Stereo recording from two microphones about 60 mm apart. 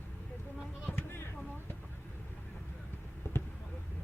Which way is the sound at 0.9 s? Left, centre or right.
Left.